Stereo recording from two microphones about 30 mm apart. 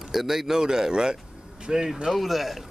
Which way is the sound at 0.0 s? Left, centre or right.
Centre.